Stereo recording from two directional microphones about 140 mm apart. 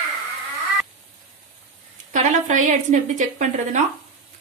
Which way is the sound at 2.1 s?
60° right (ahead or behind).